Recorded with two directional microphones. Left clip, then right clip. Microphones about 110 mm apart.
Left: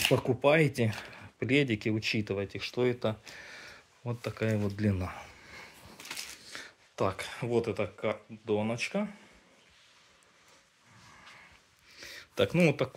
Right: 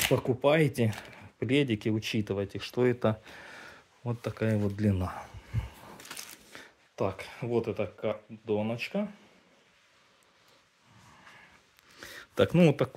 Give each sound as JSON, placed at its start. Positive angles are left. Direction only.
{"t": 0.3, "sound": "speech", "side_deg": -30}
{"t": 5.2, "sound": "a sound", "side_deg": -35}
{"t": 7.0, "sound": "speech", "side_deg": -10}
{"t": 12.4, "sound": "speech", "side_deg": -90}